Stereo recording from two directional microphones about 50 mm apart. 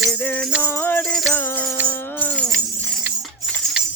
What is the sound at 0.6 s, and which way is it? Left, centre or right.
Music, left.